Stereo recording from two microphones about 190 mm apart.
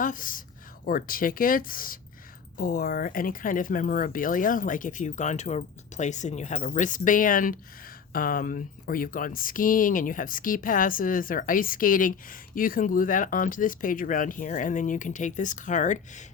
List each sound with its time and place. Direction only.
0.0 s speech: 45° left (ahead or behind)